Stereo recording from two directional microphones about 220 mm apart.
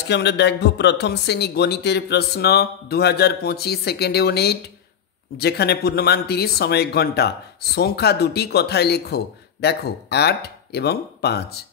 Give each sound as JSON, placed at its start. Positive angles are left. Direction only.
{"t": 0.1, "sound": "speech", "side_deg": 50}